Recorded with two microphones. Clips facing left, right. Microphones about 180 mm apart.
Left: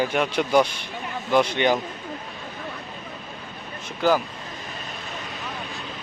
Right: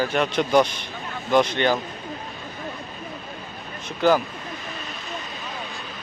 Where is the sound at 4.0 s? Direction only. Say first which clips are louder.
Right 2 dB; 5° left (ahead or behind).